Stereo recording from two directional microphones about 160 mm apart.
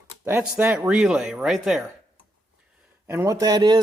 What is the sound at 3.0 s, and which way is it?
Speech, 15° right (ahead or behind).